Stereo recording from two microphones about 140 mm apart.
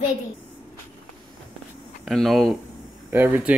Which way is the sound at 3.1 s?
15° right (ahead or behind).